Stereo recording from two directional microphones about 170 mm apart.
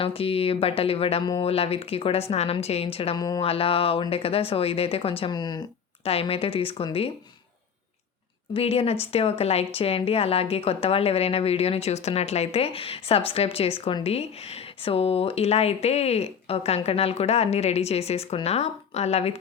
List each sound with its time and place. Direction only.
0.0 s speech: 35° left (ahead or behind)
3.2 s speech: 20° left (ahead or behind)
3.4 s speech: 35° left (ahead or behind)
6.1 s speech: 35° left (ahead or behind)
8.5 s speech: 35° left (ahead or behind)